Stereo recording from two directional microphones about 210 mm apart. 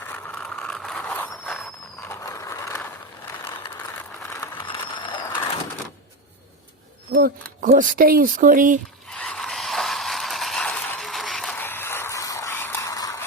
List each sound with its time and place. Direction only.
0.0 s vehicle: 10° left (ahead or behind)
4.3 s ratchet: 20° left (ahead or behind)
7.2 s speech: 40° right (ahead or behind)
9.0 s a sound: 5° left (ahead or behind)